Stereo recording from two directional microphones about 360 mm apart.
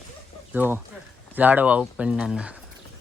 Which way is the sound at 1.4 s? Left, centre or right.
Centre.